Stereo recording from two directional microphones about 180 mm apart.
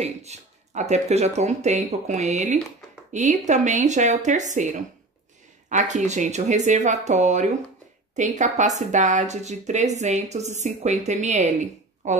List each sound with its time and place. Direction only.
0.0 s a woman's voice: 40° right (ahead or behind)
5.7 s a woman's voice: 45° right (ahead or behind)